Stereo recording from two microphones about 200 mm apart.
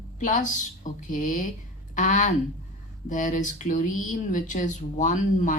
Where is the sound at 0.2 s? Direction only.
40° left (ahead or behind).